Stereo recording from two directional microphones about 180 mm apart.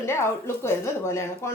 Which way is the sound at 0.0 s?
15° left (ahead or behind).